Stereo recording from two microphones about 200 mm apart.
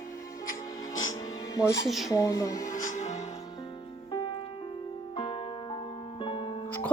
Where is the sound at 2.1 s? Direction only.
15° left (ahead or behind).